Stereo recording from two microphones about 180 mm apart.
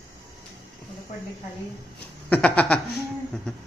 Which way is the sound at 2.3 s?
10° left (ahead or behind).